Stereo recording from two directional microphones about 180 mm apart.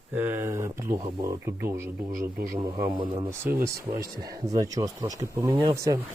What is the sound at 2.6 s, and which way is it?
Speech, 20° right (ahead or behind).